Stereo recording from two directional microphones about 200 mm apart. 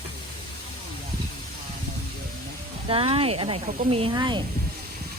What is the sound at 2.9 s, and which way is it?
Speech, 30° right (ahead or behind).